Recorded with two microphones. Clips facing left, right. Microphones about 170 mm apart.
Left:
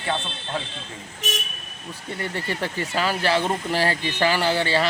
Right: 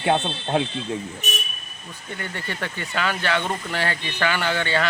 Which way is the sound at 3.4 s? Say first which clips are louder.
Left 3 dB; 10° left (ahead or behind).